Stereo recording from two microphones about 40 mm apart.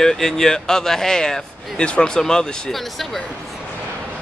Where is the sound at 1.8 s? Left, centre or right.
Left.